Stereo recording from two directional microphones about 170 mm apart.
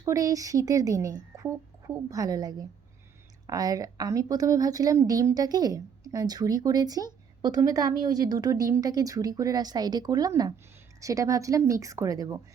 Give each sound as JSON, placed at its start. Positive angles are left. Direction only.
{"t": 0.0, "sound": "a woman's voice", "side_deg": -20}